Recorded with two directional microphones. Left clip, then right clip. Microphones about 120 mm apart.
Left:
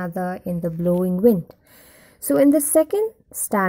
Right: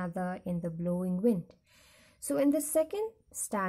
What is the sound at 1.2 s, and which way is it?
A woman's voice, 50° left (ahead or behind).